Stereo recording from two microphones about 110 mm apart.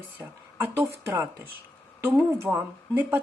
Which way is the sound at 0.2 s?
20° right (ahead or behind).